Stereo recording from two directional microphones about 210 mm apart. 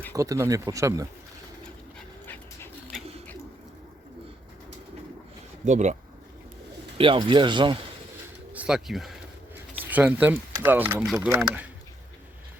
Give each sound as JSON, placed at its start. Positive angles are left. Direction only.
{"t": 0.1, "sound": "speech", "side_deg": -15}
{"t": 5.6, "sound": "speech", "side_deg": -35}
{"t": 7.0, "sound": "speech", "side_deg": -25}
{"t": 8.5, "sound": "speech", "side_deg": -5}